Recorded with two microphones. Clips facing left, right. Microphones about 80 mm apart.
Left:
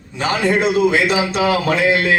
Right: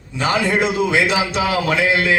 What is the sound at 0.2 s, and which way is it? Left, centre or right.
A man's voice, left.